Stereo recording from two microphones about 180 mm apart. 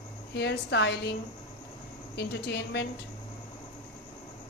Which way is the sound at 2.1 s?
65° left (ahead or behind).